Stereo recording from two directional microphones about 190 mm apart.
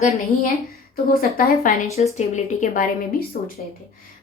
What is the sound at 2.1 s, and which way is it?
A woman's voice, 40° left (ahead or behind).